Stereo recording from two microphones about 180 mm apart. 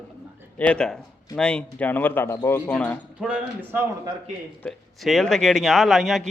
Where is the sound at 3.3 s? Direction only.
10° right (ahead or behind).